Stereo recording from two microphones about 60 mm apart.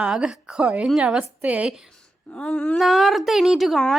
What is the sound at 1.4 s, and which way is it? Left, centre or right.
Speech, right.